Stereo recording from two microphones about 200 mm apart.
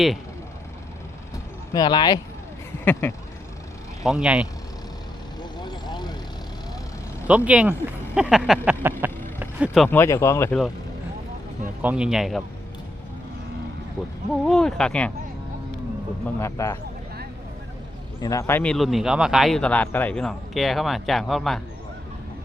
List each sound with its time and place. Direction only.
1.7 s speech: 20° left (ahead or behind)
2.8 s speech: 10° left (ahead or behind)
4.0 s speech: 5° right (ahead or behind)
5.4 s vehicle: 20° left (ahead or behind)
7.3 s speech: 5° right (ahead or behind)
9.4 s vehicle: 5° right (ahead or behind)
9.9 s speech: 15° left (ahead or behind)
11.8 s speech: 5° right (ahead or behind)
14.4 s speech: centre (ahead or behind)
16.4 s speech: 15° left (ahead or behind)
18.2 s speech: 15° left (ahead or behind); by 21.6 s centre (ahead or behind)